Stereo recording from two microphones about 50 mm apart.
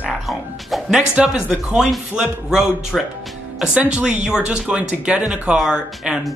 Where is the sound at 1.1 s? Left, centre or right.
Right.